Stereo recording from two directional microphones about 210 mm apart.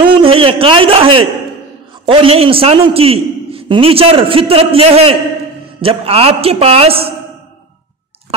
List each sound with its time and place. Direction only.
0.0 s a man's voice: 25° right (ahead or behind)